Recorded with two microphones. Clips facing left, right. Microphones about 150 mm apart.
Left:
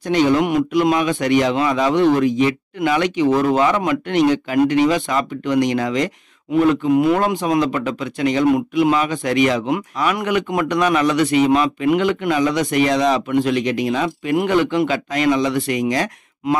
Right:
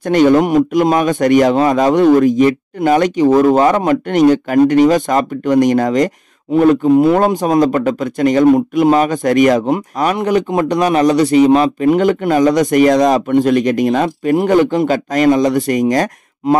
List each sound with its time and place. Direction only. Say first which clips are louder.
0.0 s a man's voice: right 6 dB; 50° right (ahead or behind)